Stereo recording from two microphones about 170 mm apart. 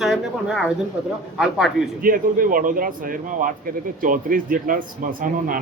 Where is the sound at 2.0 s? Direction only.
55° right (ahead or behind).